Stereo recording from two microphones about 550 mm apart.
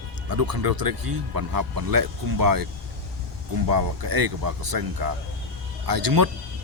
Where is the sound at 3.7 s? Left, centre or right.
Right.